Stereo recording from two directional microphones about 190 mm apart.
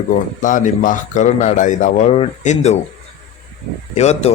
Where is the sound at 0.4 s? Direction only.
45° left (ahead or behind).